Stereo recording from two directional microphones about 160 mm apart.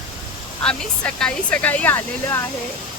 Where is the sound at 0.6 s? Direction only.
5° left (ahead or behind).